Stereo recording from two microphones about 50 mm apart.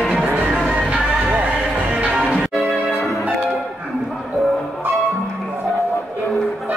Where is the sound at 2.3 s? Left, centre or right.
Centre.